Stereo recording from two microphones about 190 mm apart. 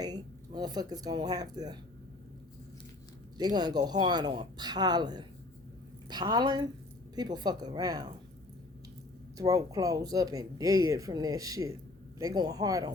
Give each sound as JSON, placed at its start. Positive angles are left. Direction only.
{"t": 0.0, "sound": "speech", "side_deg": -20}
{"t": 3.3, "sound": "speech", "side_deg": -20}
{"t": 9.4, "sound": "speech", "side_deg": -20}